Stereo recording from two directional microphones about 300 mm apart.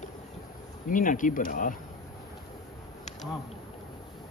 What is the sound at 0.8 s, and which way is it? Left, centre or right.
Speech, left.